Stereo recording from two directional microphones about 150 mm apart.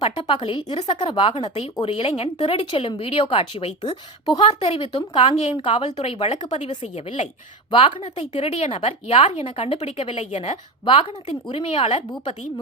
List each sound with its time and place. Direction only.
0.0 s speech: 35° left (ahead or behind)
1.0 s speech: 35° left (ahead or behind)
10.8 s speech: 35° left (ahead or behind)